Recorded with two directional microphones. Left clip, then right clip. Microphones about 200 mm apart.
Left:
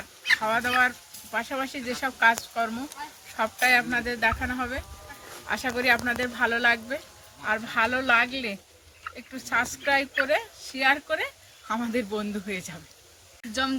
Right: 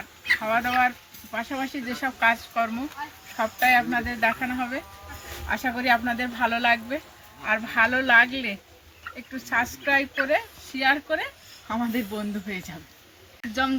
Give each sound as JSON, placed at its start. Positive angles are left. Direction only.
{"t": 0.4, "sound": "speech", "side_deg": 35}